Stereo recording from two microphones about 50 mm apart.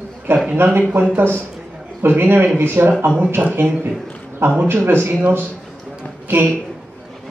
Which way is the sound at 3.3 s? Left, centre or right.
Right.